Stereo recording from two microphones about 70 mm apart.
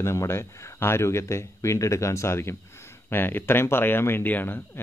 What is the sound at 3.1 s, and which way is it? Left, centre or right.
Speech, left.